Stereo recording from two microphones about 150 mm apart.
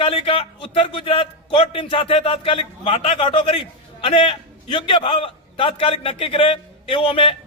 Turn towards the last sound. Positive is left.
turn(degrees=35)  # may be behind; listen again after turning